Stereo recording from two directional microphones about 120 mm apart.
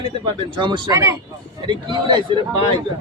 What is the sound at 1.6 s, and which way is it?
Speech, 40° right (ahead or behind).